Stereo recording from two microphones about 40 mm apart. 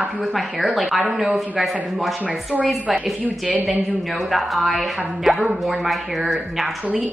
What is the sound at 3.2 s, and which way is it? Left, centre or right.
Speech, right.